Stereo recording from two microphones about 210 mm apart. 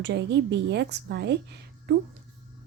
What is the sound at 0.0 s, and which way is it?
A woman's voice, 55° right (ahead or behind).